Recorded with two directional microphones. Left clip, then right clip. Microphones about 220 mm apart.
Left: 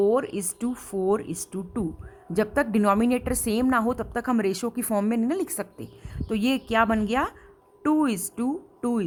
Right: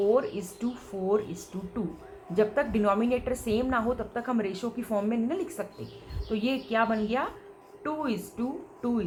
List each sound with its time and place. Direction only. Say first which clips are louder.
0.1 s a woman's voice: left 1 dB; 50° left (ahead or behind)